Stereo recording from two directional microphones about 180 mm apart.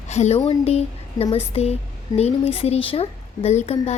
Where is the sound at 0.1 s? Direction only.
35° left (ahead or behind).